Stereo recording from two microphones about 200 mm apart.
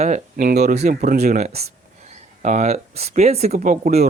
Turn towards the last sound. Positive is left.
turn(degrees=-35)  # may be behind; listen again after turning